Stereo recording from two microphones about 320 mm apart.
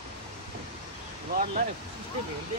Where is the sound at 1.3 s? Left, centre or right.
Right.